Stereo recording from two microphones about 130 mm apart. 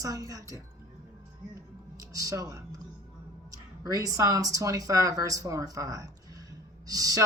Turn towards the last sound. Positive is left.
turn(degrees=-25)  # may be behind; listen again after turning